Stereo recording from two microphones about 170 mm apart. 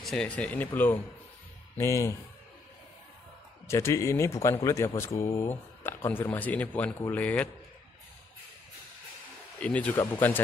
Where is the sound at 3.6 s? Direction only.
15° left (ahead or behind).